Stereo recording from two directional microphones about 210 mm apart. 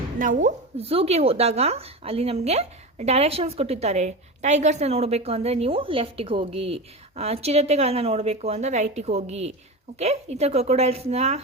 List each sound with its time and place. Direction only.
0.2 s a woman's voice: 40° right (ahead or behind)